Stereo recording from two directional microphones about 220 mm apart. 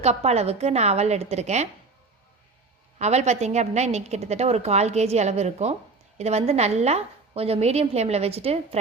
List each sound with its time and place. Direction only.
0.0 s a woman's voice: 30° right (ahead or behind)
3.0 s a woman's voice: 30° right (ahead or behind)